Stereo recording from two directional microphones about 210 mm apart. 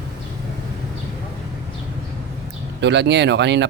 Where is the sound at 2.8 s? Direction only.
55° right (ahead or behind).